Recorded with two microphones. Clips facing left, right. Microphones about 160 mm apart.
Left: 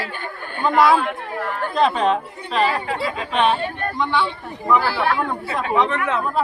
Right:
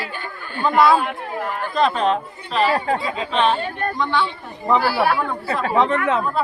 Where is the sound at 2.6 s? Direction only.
35° right (ahead or behind).